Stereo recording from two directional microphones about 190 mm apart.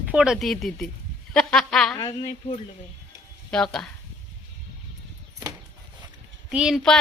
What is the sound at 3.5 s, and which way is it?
Speech, 5° left (ahead or behind).